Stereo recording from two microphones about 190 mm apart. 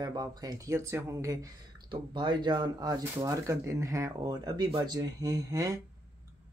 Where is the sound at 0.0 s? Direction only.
20° right (ahead or behind).